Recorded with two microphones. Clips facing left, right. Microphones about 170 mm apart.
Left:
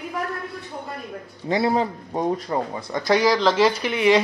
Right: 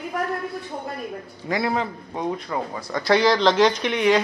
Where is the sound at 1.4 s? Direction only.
30° left (ahead or behind).